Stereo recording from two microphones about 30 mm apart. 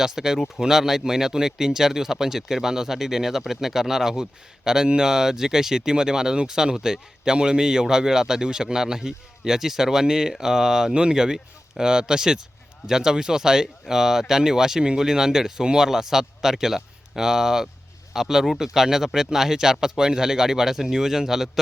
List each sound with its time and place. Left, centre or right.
0.0 s speech: centre
7.3 s speech: right
10.9 s speech: right
15.9 s speech: centre